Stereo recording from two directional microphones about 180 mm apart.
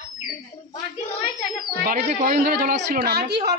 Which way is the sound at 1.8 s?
50° right (ahead or behind).